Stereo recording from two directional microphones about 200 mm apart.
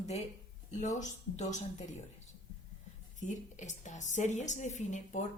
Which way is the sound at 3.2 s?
40° left (ahead or behind).